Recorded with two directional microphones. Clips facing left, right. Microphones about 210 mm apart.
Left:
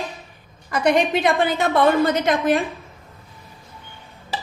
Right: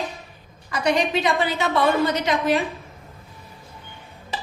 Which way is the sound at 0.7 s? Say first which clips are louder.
Left 3 dB; 55° left (ahead or behind).